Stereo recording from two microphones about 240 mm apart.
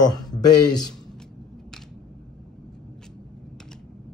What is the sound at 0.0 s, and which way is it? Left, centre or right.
Speech, centre.